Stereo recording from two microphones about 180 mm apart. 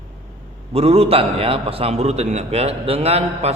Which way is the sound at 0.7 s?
35° right (ahead or behind).